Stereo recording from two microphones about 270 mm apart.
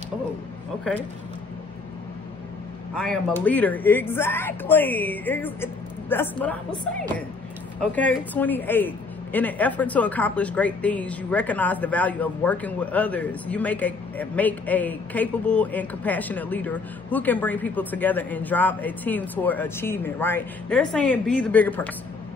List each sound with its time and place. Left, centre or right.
2.9 s speech: centre
7.8 s a woman's voice: centre